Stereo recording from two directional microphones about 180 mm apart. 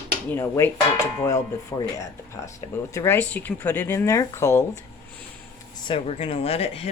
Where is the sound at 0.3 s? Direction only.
15° left (ahead or behind).